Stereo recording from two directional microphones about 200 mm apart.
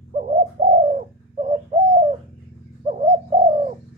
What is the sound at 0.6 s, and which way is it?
Bird, 30° right (ahead or behind).